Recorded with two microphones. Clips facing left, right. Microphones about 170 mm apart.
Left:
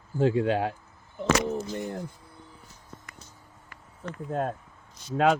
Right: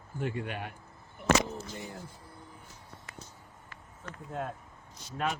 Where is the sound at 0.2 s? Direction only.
90° left.